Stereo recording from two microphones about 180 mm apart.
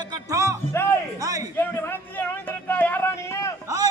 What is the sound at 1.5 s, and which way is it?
Speech, 15° left (ahead or behind).